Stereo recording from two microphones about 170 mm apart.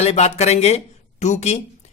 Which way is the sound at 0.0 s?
40° left (ahead or behind).